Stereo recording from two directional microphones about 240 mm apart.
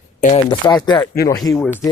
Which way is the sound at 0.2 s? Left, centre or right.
Left.